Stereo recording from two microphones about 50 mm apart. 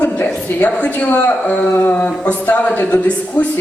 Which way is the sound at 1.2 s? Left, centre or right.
Left.